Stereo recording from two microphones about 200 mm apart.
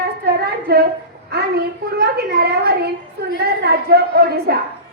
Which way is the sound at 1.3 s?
55° right (ahead or behind).